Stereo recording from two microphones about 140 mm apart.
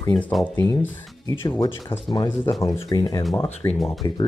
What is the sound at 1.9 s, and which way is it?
Speech, 15° left (ahead or behind).